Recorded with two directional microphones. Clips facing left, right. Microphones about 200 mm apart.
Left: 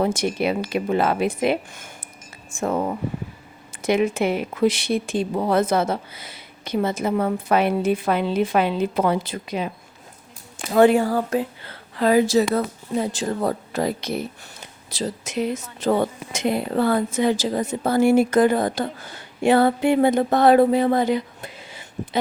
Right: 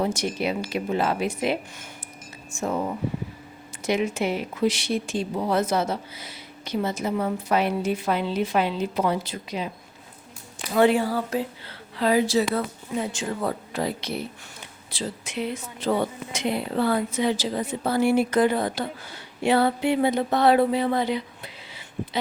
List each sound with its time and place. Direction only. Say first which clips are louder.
0.0 s a woman's voice: left 4 dB; 55° left (ahead or behind)
3.8 s a woman's voice: left 4 dB; 55° left (ahead or behind)
10.7 s a woman's voice: left 4 dB; 45° left (ahead or behind)
19.4 s a sound: left 4 dB; 50° left (ahead or behind)